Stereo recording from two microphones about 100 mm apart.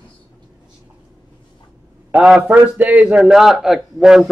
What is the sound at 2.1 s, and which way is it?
A man's voice, 10° right (ahead or behind).